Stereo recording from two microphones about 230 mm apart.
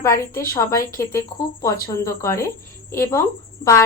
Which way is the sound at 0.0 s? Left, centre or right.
Centre.